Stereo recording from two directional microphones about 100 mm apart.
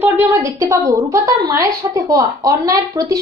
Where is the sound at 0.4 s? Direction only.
35° right (ahead or behind).